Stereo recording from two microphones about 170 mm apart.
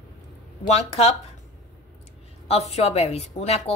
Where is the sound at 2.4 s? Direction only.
40° left (ahead or behind).